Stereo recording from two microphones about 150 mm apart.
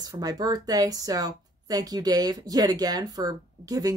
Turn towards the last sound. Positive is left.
turn(degrees=-25)  # may be behind; listen again after turning